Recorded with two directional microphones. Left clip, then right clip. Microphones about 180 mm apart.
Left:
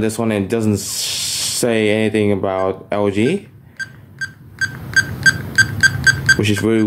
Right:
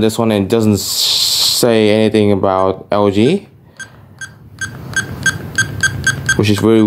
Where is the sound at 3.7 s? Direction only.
10° right (ahead or behind).